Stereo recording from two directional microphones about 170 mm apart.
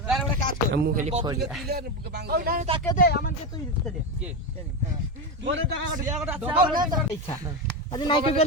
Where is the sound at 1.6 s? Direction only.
70° right (ahead or behind).